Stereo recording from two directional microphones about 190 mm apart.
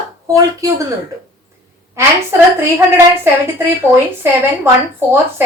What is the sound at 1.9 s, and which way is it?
Speech, 15° right (ahead or behind).